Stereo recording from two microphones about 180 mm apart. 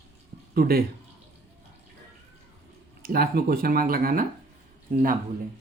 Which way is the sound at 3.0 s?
55° right (ahead or behind).